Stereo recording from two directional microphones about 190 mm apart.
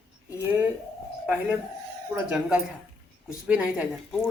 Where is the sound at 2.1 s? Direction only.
5° right (ahead or behind).